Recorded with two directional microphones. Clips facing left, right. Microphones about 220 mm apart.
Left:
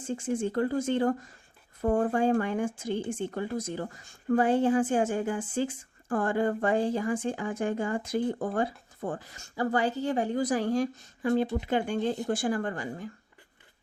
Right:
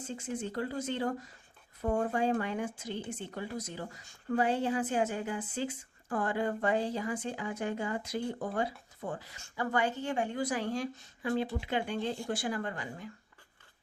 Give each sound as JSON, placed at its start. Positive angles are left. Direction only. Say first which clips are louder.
{"t": 0.0, "sound": "speech", "louder": "left 7 dB", "side_deg": 50}